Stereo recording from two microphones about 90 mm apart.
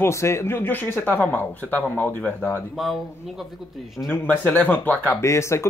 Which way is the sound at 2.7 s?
Centre (ahead or behind).